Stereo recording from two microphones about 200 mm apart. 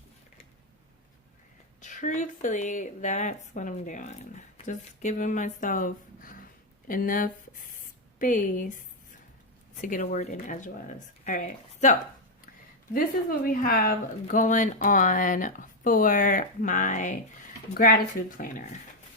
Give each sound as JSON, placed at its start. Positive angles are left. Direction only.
{"t": 1.8, "sound": "speech", "side_deg": 40}
{"t": 9.8, "sound": "speech", "side_deg": 45}
{"t": 13.4, "sound": "speech", "side_deg": 45}